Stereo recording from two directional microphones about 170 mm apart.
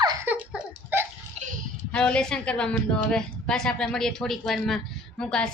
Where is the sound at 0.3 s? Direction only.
10° right (ahead or behind).